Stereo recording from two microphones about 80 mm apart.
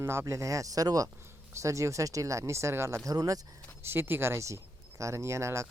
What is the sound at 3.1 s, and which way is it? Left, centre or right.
Speech, right.